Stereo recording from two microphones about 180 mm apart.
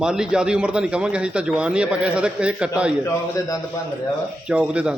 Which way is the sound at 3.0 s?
15° left (ahead or behind).